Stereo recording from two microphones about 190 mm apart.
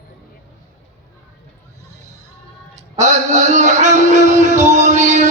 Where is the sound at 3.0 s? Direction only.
40° right (ahead or behind).